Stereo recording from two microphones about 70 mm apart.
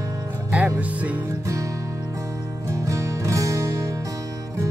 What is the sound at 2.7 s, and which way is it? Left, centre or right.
Music, right.